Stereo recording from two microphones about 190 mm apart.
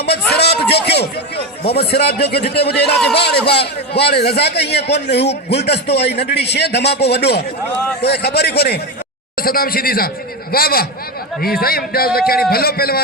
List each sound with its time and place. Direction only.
0.3 s a sound: 60° left (ahead or behind)
1.8 s a man's voice: 60° left (ahead or behind)
5.2 s a man's voice: 35° left (ahead or behind)
5.5 s a man's voice: 60° left (ahead or behind)